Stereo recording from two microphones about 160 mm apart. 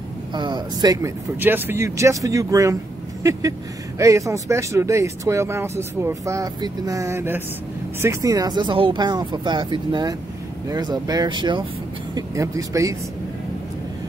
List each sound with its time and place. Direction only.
0.3 s speech: 30° right (ahead or behind)
1.4 s speech: 15° right (ahead or behind)
4.0 s speech: 20° right (ahead or behind)